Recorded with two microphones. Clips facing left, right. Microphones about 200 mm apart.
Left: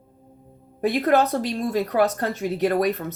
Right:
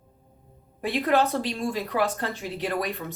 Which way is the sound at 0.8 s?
45° left (ahead or behind).